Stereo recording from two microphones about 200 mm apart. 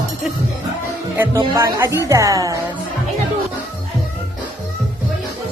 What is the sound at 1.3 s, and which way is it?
Speech, 20° right (ahead or behind).